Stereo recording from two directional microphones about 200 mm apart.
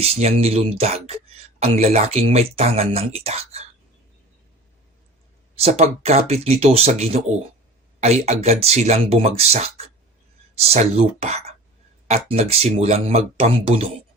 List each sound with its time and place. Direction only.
0.0 s speech: 30° right (ahead or behind)
5.5 s speech: 30° right (ahead or behind)